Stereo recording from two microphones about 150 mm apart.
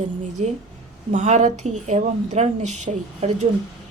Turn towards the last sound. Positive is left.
turn(degrees=-50)  # may be behind; listen again after turning